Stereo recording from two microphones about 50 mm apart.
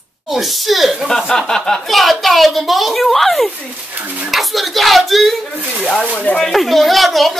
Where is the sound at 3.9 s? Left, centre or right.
Right.